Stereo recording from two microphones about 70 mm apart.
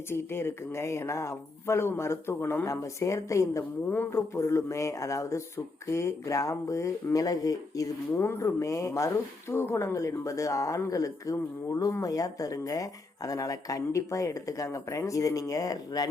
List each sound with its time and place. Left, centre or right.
0.1 s speech: left
2.6 s speech: left
3.6 s speech: left
8.1 s speech: left
8.4 s speech: left